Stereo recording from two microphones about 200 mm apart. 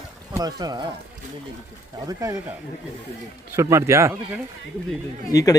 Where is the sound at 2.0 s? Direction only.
15° right (ahead or behind).